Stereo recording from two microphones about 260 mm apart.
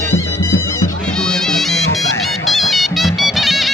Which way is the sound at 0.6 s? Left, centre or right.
Centre.